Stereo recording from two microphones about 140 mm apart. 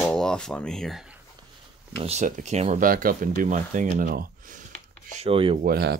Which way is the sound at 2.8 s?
85° right.